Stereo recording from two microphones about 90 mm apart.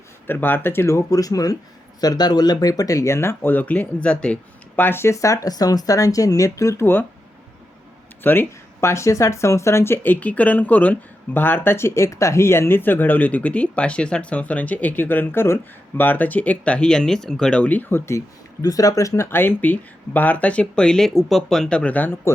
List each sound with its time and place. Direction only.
0.3 s speech: 20° left (ahead or behind)
4.8 s speech: 25° left (ahead or behind)
8.2 s speech: 25° left (ahead or behind)
18.6 s speech: 40° left (ahead or behind); by 22.3 s 25° left (ahead or behind)